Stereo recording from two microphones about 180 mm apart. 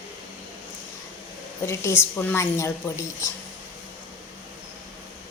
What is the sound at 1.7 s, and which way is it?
A woman's voice, 15° left (ahead or behind).